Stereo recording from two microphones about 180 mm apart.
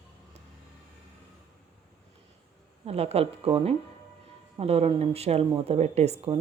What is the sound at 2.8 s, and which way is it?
Speech, 35° right (ahead or behind).